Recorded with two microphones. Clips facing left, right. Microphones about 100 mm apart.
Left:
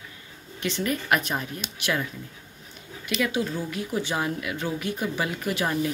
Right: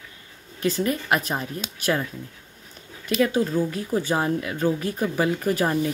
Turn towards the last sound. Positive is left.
turn(degrees=-35)  # may be behind; listen again after turning